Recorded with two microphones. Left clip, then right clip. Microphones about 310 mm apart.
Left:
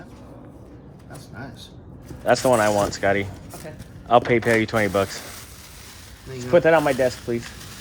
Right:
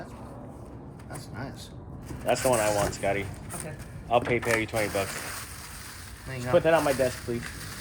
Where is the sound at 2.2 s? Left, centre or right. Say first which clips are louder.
Left 7 dB; left.